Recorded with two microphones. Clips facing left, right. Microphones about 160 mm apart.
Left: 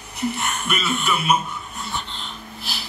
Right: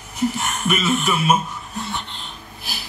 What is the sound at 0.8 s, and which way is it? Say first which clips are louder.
Speech: right 5 dB; 45° right (ahead or behind).